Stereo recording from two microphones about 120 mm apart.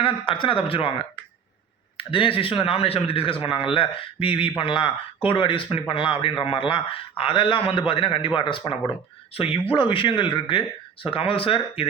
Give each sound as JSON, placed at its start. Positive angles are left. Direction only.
{"t": 0.0, "sound": "a man's voice", "side_deg": 45}